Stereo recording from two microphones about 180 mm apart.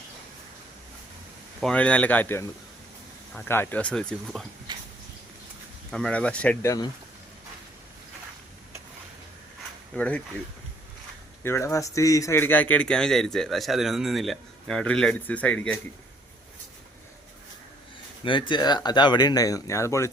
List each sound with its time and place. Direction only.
1.6 s speech: 5° left (ahead or behind)
5.9 s speech: 5° left (ahead or behind)
9.9 s speech: 5° left (ahead or behind)
11.4 s speech: 15° left (ahead or behind)
18.2 s speech: 25° left (ahead or behind)